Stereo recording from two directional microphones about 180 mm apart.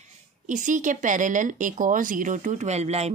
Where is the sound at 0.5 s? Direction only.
45° right (ahead or behind).